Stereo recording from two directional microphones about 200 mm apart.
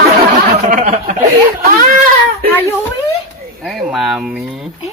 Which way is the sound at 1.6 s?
45° right (ahead or behind).